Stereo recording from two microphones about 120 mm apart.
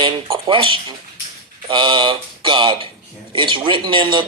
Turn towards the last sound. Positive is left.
turn(degrees=-40)  # may be behind; listen again after turning